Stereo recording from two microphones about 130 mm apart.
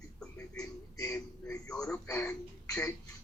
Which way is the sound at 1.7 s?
5° left (ahead or behind).